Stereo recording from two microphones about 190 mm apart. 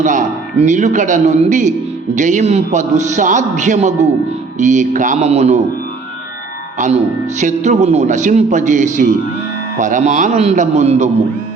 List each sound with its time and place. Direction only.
0.0 s a man's voice: 40° right (ahead or behind)
6.7 s a man's voice: 40° right (ahead or behind)